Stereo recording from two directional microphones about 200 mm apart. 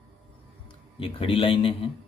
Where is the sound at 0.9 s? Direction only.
25° left (ahead or behind).